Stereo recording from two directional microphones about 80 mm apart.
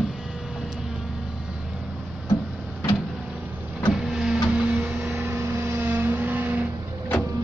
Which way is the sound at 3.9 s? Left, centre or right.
Centre.